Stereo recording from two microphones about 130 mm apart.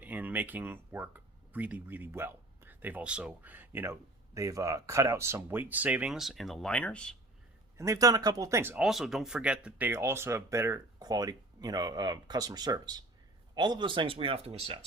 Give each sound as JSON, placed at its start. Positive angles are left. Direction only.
{"t": 0.0, "sound": "speech", "side_deg": -10}
{"t": 7.8, "sound": "speech", "side_deg": -25}
{"t": 8.7, "sound": "speech", "side_deg": 0}